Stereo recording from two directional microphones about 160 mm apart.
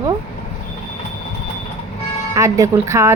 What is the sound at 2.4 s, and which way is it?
Speech, 20° right (ahead or behind).